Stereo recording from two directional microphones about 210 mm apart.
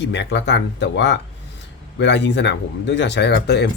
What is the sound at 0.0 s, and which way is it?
Speech, 55° left (ahead or behind).